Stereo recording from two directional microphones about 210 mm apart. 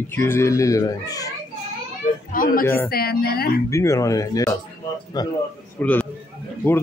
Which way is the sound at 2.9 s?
45° left (ahead or behind).